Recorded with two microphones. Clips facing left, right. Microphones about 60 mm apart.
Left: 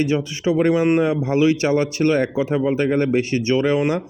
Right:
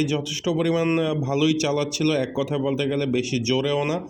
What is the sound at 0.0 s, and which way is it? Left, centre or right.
Speech, left.